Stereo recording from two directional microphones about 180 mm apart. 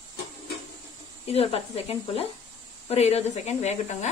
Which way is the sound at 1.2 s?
35° left (ahead or behind).